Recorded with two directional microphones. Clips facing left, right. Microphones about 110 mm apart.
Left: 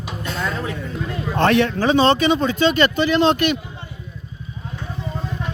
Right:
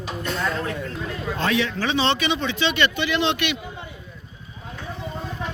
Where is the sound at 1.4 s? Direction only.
60° left (ahead or behind).